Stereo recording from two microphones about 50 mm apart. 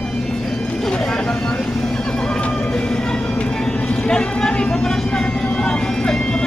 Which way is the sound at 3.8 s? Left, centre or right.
Centre.